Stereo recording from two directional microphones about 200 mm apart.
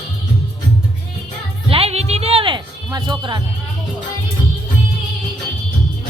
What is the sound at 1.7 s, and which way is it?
Music, 30° right (ahead or behind).